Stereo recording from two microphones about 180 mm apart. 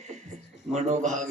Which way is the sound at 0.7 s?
40° right (ahead or behind).